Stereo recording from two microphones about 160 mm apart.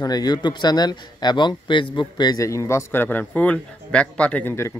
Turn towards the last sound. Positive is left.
turn(degrees=15)  # may be behind; listen again after turning